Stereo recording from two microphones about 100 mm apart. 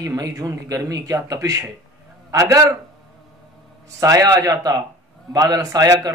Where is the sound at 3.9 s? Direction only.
35° right (ahead or behind).